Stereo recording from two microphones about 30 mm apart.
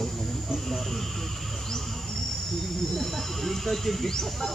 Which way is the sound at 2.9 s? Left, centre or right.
Centre.